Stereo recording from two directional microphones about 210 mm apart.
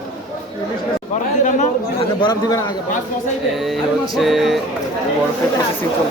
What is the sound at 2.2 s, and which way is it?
Speech, 20° left (ahead or behind).